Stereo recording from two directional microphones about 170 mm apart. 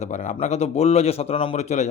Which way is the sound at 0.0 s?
45° left (ahead or behind).